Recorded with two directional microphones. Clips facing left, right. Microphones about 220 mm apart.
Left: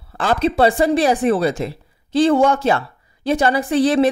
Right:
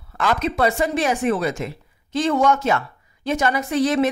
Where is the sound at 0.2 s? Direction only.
30° left (ahead or behind).